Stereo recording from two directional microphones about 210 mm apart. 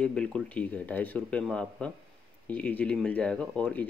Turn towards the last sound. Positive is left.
turn(degrees=5)  # may be behind; listen again after turning